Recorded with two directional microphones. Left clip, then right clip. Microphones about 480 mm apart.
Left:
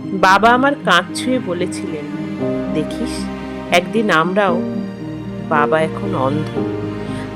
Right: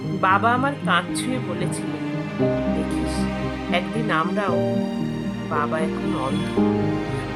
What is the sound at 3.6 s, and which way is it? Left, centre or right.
Speech, centre.